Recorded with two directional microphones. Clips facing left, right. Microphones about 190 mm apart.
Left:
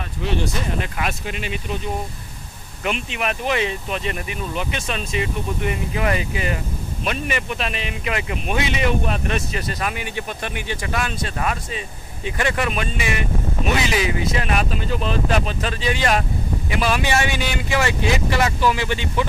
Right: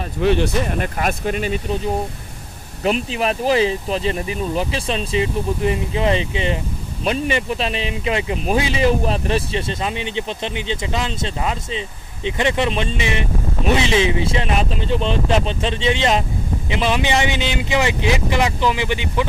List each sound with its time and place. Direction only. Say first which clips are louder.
0.2 s speech: right 7 dB; 55° right (ahead or behind)
0.9 s speech: right 6 dB; 45° right (ahead or behind)
2.8 s speech: right 5 dB; 35° right (ahead or behind); by 19.2 s 15° right (ahead or behind)